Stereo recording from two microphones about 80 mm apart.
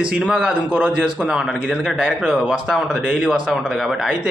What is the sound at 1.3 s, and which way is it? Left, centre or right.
Speech, centre.